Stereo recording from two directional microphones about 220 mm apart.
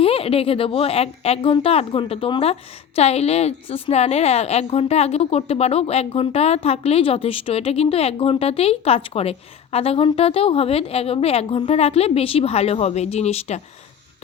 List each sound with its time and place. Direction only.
0.0 s speech: 25° left (ahead or behind)